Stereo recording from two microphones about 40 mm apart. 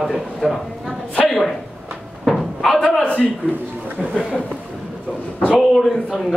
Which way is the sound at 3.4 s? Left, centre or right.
Left.